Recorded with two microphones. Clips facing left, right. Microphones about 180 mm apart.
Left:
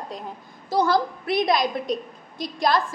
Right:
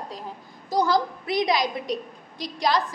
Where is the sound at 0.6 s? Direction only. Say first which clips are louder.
Left 1 dB; 15° right (ahead or behind).